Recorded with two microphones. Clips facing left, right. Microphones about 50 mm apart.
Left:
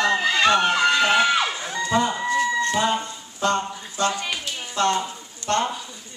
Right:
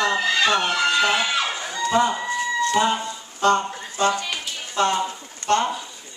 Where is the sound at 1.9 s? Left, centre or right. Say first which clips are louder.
Right 2 dB; centre.